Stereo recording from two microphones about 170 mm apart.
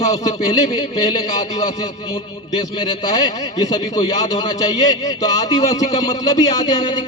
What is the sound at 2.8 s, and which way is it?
A man's voice, 25° left (ahead or behind).